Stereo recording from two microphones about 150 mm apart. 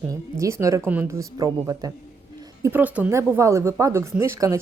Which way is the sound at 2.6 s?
10° right (ahead or behind).